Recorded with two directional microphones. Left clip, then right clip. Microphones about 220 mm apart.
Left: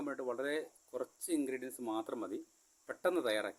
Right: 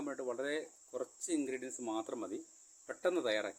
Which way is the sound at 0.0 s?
10° left (ahead or behind).